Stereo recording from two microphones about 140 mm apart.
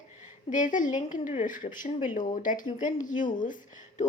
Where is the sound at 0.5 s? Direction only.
65° left (ahead or behind).